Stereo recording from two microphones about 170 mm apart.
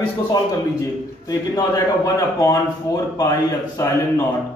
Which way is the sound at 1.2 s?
20° left (ahead or behind).